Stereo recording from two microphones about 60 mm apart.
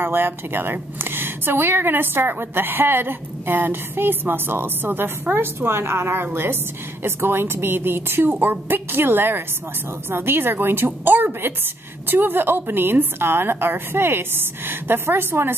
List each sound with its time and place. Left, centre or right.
0.0 s a woman's voice: right